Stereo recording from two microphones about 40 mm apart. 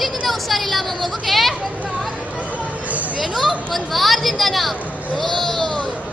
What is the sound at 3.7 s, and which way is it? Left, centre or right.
A woman's voice, centre.